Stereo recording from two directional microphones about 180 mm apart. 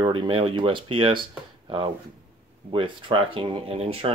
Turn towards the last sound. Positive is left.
turn(degrees=-35)  # may be behind; listen again after turning